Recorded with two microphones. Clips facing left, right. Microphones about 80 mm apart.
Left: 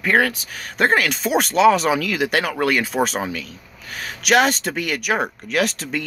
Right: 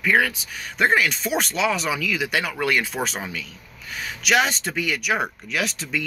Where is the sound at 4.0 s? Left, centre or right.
Left.